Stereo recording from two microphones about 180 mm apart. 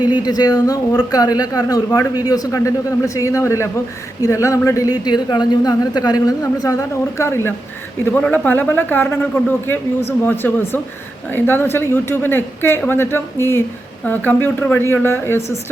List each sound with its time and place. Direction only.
0.0 s speech: 10° right (ahead or behind)
0.3 s speech: 20° left (ahead or behind)